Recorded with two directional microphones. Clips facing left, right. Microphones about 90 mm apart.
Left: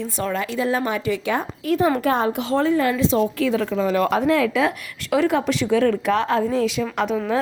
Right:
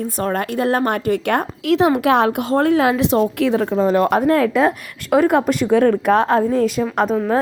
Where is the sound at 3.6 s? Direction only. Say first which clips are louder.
Right 5 dB; 40° right (ahead or behind).